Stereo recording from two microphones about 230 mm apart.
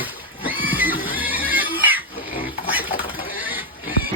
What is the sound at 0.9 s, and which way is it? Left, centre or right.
Neigh, left.